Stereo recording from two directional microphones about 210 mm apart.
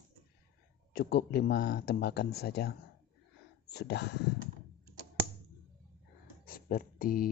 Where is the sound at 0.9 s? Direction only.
50° left (ahead or behind).